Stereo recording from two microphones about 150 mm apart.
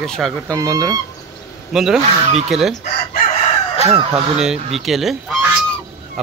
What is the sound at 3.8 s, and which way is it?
Speech, 40° right (ahead or behind).